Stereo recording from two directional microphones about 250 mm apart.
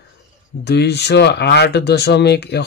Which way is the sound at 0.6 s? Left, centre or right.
Left.